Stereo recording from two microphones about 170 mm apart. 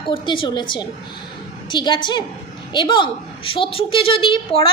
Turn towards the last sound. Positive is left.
turn(degrees=30)  # may be behind; listen again after turning